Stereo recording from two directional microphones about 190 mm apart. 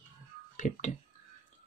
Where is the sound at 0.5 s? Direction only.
40° left (ahead or behind).